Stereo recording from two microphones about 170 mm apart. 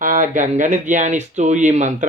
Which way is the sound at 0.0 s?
50° right (ahead or behind).